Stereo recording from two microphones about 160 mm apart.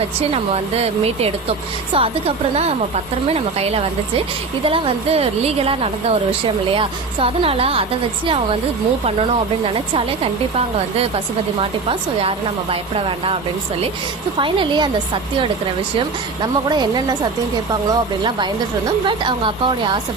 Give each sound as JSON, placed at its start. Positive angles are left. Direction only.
{"t": 0.2, "sound": "a woman's voice", "side_deg": -40}
{"t": 9.6, "sound": "a woman's voice", "side_deg": -35}
{"t": 12.7, "sound": "a woman's voice", "side_deg": -35}
{"t": 14.3, "sound": "a woman's voice", "side_deg": -30}